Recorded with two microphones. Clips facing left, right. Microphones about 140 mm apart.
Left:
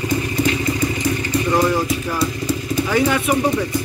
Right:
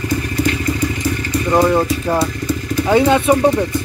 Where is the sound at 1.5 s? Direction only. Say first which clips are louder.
Right 5 dB; 25° right (ahead or behind).